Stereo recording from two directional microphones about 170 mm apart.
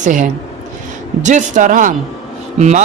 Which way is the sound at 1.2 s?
45° right (ahead or behind).